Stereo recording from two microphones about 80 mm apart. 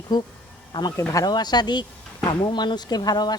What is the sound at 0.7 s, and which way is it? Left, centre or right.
Speech, left.